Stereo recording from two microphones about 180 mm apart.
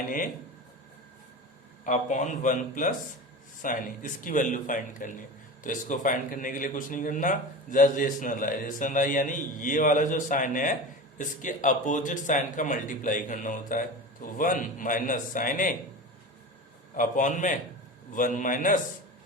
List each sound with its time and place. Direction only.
1.8 s speech: 40° left (ahead or behind)
17.0 s speech: 45° left (ahead or behind)